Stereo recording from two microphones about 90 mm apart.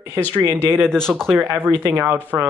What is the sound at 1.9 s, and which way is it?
Speech, 20° right (ahead or behind).